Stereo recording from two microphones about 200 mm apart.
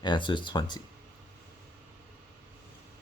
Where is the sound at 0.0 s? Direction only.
25° left (ahead or behind).